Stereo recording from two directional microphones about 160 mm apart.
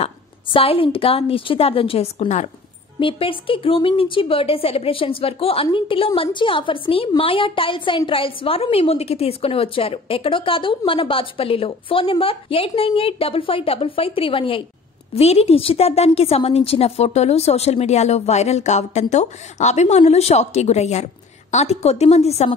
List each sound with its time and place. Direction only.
0.0 s speech: 35° left (ahead or behind)
3.0 s a woman's voice: 35° left (ahead or behind)